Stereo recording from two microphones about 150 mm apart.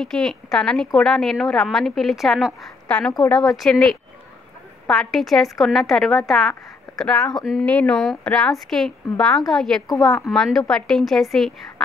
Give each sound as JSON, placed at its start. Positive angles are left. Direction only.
{"t": 0.0, "sound": "a woman's voice", "side_deg": 5}